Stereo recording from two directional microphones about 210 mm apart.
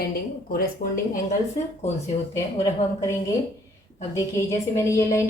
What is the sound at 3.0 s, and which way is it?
Speech, 15° left (ahead or behind).